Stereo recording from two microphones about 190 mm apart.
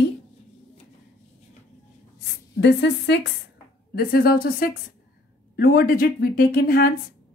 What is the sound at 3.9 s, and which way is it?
A woman's voice, 50° left (ahead or behind).